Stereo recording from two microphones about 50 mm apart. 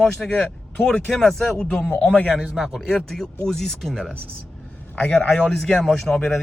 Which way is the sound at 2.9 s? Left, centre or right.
Centre.